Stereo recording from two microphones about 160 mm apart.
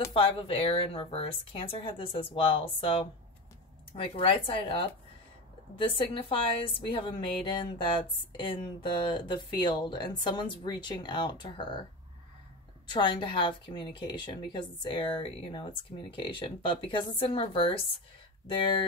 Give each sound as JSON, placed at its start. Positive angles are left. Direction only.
{"t": 0.1, "sound": "a woman's voice", "side_deg": 35}
{"t": 12.8, "sound": "a woman's voice", "side_deg": 30}